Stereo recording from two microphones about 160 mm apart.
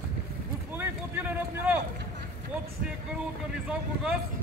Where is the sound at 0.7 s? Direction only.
10° right (ahead or behind).